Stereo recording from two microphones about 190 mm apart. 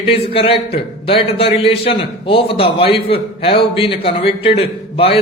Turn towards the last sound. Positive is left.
turn(degrees=30)  # may be behind; listen again after turning